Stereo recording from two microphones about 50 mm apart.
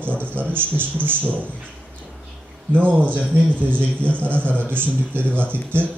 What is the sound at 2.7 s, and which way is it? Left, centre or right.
A man's voice, right.